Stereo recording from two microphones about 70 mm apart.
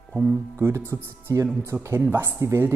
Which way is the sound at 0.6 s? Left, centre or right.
Right.